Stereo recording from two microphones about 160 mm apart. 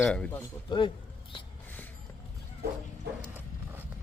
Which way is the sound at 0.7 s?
30° left (ahead or behind).